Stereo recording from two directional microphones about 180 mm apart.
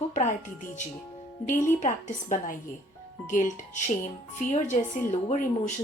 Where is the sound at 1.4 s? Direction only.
45° left (ahead or behind).